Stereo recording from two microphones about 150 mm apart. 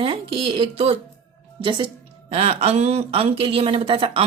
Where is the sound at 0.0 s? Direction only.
40° right (ahead or behind).